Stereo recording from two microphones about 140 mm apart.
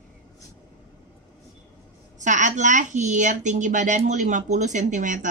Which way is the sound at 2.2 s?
60° right (ahead or behind).